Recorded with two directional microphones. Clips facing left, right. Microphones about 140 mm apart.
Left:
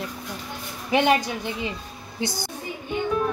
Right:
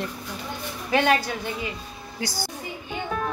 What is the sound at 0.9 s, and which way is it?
A woman's voice, 15° left (ahead or behind).